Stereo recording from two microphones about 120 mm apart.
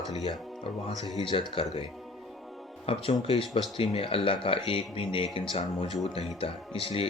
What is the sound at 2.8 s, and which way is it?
Speech, 50° left (ahead or behind).